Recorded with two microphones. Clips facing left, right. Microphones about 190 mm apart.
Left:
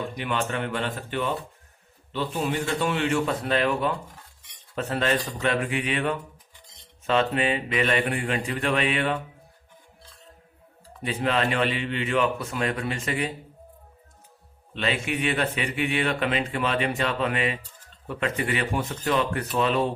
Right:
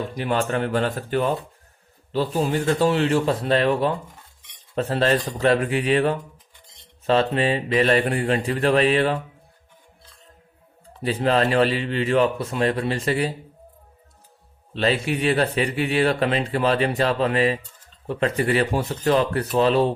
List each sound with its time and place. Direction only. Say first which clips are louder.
0.2 s speech: right 6 dB; 40° right (ahead or behind)
11.0 s speech: right 5 dB; 35° right (ahead or behind)
14.7 s speech: right 5 dB; 35° right (ahead or behind)